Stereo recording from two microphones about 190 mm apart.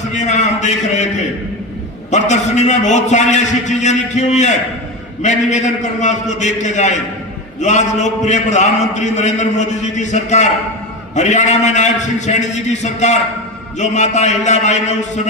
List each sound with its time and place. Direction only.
0.1 s a man's voice: 40° left (ahead or behind)